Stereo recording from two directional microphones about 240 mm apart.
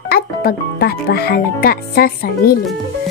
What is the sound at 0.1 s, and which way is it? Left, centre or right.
A child's voice, left.